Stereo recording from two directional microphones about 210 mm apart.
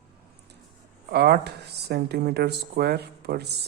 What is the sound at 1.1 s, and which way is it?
Speech, 50° right (ahead or behind).